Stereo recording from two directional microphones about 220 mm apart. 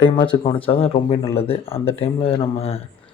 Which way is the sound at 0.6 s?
25° left (ahead or behind).